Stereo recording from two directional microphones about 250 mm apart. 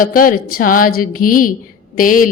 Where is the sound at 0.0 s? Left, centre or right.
Left.